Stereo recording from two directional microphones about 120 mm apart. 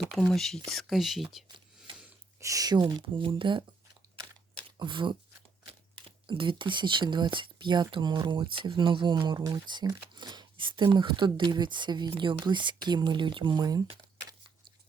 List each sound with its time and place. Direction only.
0.1 s speech: 5° left (ahead or behind)
2.4 s speech: 30° right (ahead or behind)
4.8 s speech: 40° right (ahead or behind)